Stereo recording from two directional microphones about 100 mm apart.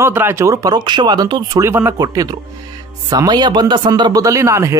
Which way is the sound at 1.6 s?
25° right (ahead or behind).